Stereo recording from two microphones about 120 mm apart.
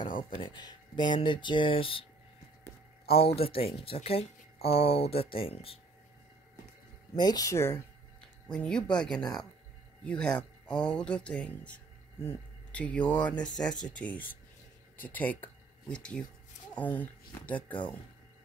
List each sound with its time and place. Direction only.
0.0 s a sound: 90° left
0.4 s speech: 35° left (ahead or behind)
3.1 s speech: 55° left (ahead or behind)
7.2 s speech: 35° left (ahead or behind)
8.5 s speech: 10° left (ahead or behind)